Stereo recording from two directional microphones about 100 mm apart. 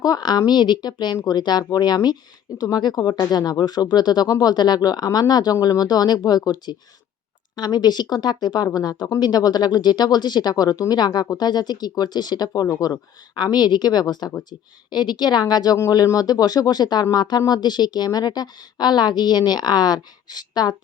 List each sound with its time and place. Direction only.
0.0 s speech: 45° left (ahead or behind)